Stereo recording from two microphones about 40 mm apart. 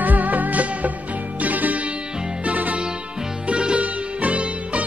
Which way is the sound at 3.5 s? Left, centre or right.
Right.